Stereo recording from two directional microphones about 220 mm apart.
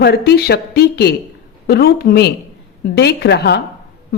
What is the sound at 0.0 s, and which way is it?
A woman's voice, 45° left (ahead or behind).